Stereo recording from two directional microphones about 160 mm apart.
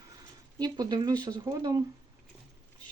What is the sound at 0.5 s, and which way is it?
Speech, 25° right (ahead or behind).